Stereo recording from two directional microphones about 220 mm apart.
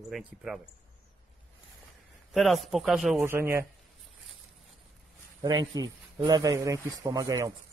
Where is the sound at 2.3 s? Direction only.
Centre (ahead or behind).